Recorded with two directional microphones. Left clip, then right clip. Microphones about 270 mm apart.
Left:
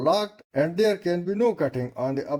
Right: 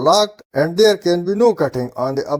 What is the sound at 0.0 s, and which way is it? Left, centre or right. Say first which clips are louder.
Speech: right 9 dB; right.